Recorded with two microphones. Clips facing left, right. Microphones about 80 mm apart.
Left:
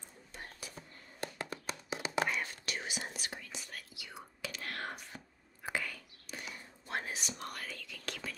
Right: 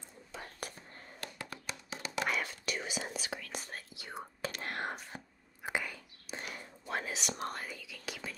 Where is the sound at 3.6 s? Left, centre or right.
Right.